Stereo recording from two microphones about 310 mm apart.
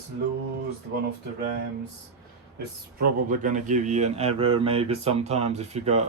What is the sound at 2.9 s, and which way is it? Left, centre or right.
Speech, right.